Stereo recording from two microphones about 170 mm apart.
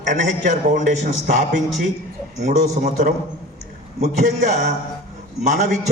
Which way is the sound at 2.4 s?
45° right (ahead or behind).